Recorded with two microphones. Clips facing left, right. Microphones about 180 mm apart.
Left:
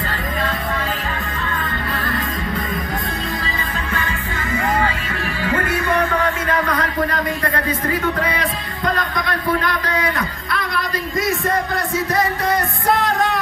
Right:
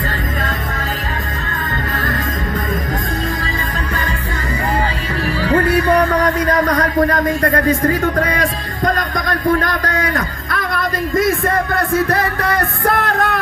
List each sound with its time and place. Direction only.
5.4 s music: 35° right (ahead or behind); by 13.4 s 60° right (ahead or behind)